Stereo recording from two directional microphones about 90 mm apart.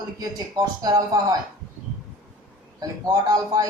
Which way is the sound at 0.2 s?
45° right (ahead or behind).